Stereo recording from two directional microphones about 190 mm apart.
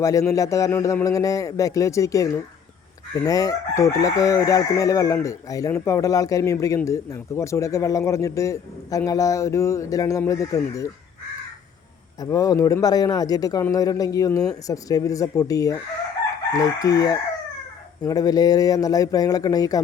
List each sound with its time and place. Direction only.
0.0 s chicken: 15° left (ahead or behind)
12.2 s chicken: 20° left (ahead or behind)
16.5 s speech: 20° left (ahead or behind)